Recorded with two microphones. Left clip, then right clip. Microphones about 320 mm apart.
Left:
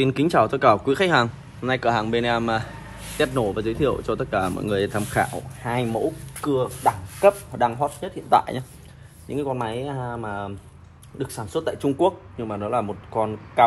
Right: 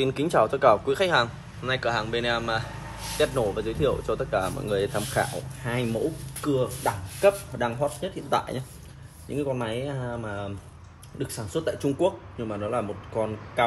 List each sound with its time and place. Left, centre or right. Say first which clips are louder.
0.0 s speech: left 3 dB; left
5.6 s a man's voice: left 4 dB; centre